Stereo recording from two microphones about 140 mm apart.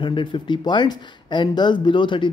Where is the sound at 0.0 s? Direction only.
35° left (ahead or behind).